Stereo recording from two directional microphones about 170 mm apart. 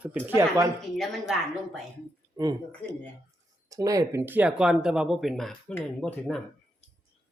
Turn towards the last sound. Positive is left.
turn(degrees=5)  # may be behind; listen again after turning